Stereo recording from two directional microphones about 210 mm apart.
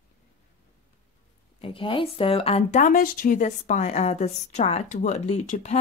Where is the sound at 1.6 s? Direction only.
25° left (ahead or behind).